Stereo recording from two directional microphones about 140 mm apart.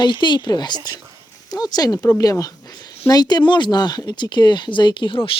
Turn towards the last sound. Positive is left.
turn(degrees=40)  # may be behind; listen again after turning